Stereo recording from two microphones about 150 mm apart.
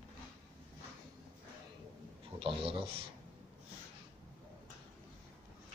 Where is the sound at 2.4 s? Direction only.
40° right (ahead or behind).